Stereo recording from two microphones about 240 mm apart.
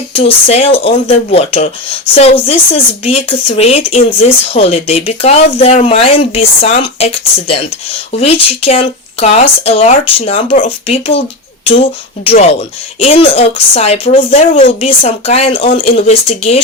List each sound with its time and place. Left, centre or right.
0.1 s speech: left